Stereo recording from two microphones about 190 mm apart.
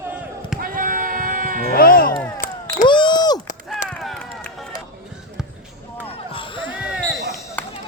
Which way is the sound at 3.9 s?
Centre (ahead or behind).